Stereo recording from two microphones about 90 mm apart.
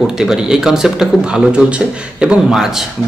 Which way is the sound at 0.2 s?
5° right (ahead or behind).